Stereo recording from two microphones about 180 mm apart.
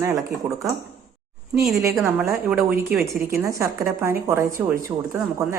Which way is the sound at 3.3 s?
15° right (ahead or behind).